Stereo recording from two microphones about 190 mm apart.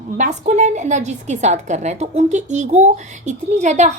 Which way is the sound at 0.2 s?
40° right (ahead or behind).